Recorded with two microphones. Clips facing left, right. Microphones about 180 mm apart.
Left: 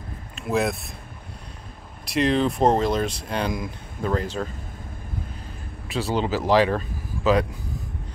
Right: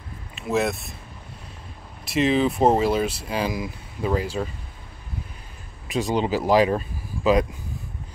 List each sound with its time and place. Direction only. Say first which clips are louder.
0.4 s speech: even; centre (ahead or behind)
2.0 s speech: right 1 dB; centre (ahead or behind)
5.9 s speech: right 2 dB; 15° right (ahead or behind)